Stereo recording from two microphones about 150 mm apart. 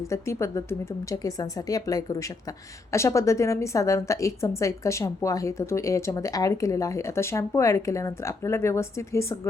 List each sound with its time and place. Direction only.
0.1 s a woman's voice: 20° left (ahead or behind)